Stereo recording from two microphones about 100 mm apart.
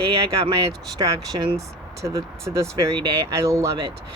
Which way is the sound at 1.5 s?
35° right (ahead or behind).